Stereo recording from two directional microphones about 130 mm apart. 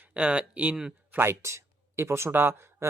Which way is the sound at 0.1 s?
10° right (ahead or behind).